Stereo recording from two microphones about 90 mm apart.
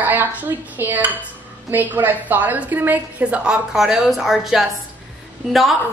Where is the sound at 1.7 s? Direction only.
20° right (ahead or behind).